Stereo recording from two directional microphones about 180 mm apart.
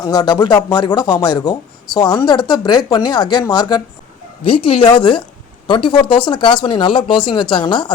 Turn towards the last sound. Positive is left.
turn(degrees=25)  # may be behind; listen again after turning